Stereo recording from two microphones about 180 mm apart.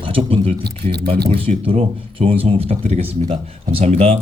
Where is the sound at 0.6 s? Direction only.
65° right (ahead or behind).